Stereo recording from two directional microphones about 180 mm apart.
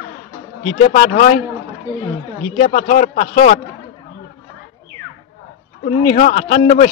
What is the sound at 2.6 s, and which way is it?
A man's voice, 40° left (ahead or behind).